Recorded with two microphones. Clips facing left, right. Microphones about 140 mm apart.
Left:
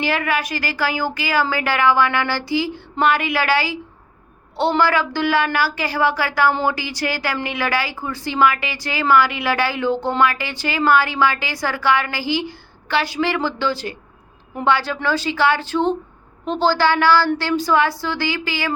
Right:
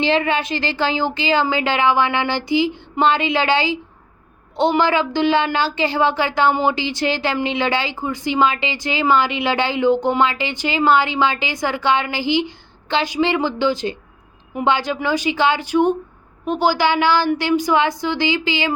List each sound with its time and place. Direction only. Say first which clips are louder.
0.0 s a woman's voice: right 3 dB; 25° right (ahead or behind)